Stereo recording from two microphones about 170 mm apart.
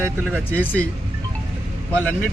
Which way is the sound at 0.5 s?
10° left (ahead or behind).